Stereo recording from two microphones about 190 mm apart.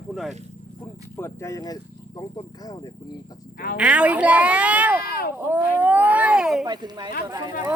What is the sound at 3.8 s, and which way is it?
Speech, 5° right (ahead or behind).